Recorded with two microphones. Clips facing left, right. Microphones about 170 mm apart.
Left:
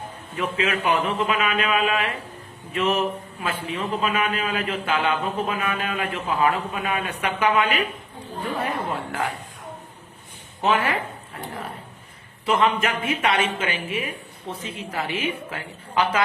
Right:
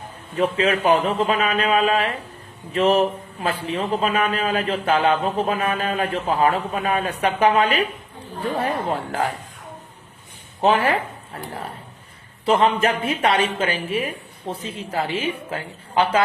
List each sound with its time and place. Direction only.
0.3 s a man's voice: 35° right (ahead or behind)
8.9 s a man's voice: 35° right (ahead or behind)
10.6 s a man's voice: 30° right (ahead or behind)
12.5 s a man's voice: 35° right (ahead or behind)